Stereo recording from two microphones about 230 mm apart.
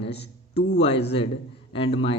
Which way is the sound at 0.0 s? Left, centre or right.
Left.